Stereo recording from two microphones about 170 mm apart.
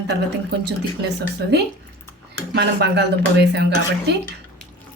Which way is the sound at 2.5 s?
75° right (ahead or behind).